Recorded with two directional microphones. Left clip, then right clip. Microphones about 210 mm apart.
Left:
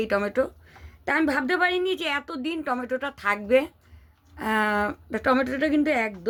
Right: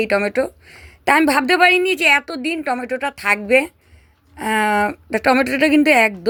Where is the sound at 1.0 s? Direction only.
30° right (ahead or behind).